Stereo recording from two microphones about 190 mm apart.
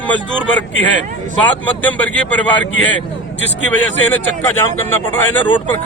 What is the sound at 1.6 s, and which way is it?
A man's voice, 10° left (ahead or behind).